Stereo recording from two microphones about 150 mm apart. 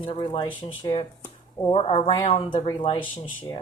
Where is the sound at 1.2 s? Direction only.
20° left (ahead or behind).